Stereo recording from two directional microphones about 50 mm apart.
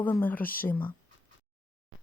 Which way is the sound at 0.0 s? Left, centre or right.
Left.